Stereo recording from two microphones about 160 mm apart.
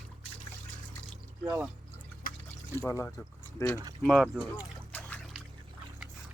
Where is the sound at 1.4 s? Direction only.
10° right (ahead or behind).